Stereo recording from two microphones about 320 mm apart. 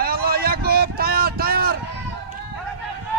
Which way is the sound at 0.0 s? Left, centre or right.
Right.